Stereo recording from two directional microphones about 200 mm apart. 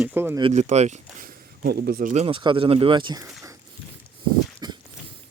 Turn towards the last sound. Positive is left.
turn(degrees=-20)  # may be behind; listen again after turning